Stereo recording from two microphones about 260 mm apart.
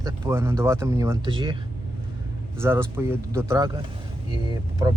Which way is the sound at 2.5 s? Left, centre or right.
Centre.